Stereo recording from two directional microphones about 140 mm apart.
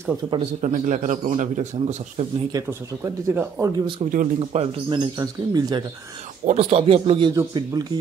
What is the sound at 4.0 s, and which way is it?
Speech, 50° right (ahead or behind).